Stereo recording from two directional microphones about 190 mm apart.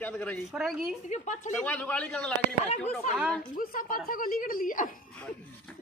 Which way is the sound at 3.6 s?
50° left (ahead or behind).